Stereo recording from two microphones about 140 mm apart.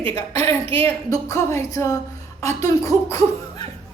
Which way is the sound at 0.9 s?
20° left (ahead or behind).